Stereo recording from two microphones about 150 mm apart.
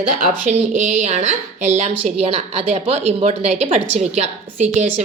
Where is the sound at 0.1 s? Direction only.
60° right (ahead or behind).